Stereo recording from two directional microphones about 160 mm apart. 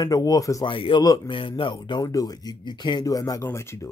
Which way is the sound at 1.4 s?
30° left (ahead or behind).